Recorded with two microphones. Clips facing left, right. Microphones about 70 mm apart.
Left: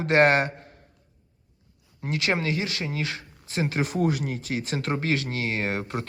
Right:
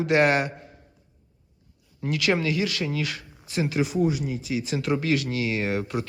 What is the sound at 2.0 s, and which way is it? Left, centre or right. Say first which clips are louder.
Speech: right 2 dB; left.